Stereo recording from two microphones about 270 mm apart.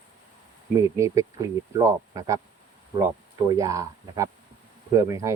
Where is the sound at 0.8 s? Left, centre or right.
Centre.